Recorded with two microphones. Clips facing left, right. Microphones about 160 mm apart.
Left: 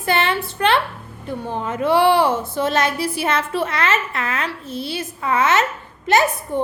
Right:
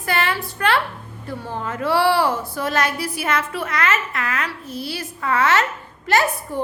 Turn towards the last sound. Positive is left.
turn(degrees=20)  # may be behind; listen again after turning